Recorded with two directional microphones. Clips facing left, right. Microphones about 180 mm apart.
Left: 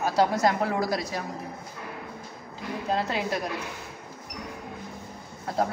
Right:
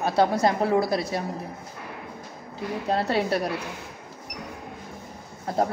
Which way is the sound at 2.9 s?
35° right (ahead or behind).